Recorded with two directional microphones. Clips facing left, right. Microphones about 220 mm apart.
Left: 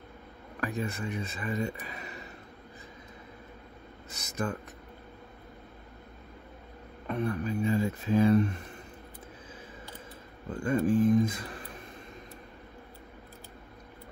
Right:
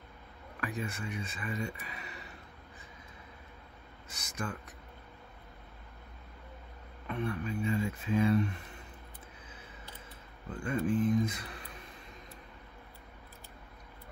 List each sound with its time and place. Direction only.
0.6 s speech: 40° left (ahead or behind)
4.2 s speech: 40° left (ahead or behind)
7.1 s speech: 40° left (ahead or behind)
10.5 s speech: 45° left (ahead or behind)